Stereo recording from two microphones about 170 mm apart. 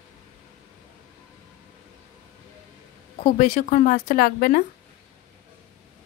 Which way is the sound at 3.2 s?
45° left (ahead or behind).